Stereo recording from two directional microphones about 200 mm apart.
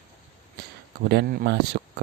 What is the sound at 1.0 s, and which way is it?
Speech, 55° right (ahead or behind).